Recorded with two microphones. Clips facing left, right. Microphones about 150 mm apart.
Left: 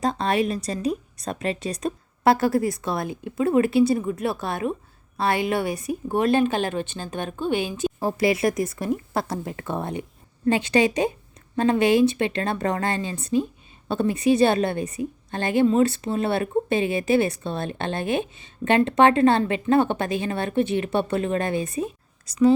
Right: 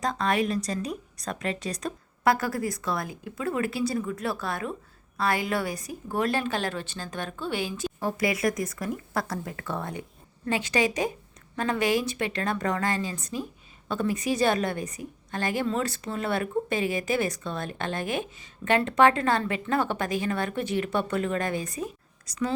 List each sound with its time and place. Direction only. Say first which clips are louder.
0.0 s a woman's voice: left 4 dB; 25° left (ahead or behind)